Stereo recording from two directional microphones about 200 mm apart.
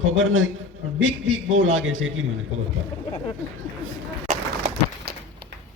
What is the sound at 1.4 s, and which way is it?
Speech, 75° right (ahead or behind).